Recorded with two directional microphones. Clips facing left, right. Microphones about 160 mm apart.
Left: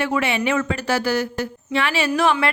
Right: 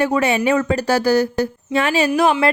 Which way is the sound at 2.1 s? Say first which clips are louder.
Right 1 dB; 30° right (ahead or behind).